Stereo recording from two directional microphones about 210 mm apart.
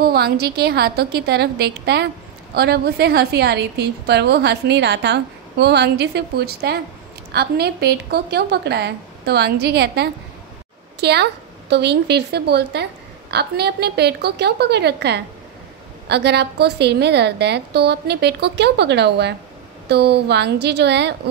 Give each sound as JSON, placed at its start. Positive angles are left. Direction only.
{"t": 0.0, "sound": "a woman's voice", "side_deg": -50}